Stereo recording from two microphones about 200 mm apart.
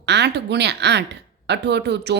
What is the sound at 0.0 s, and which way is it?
A woman's voice, 55° right (ahead or behind).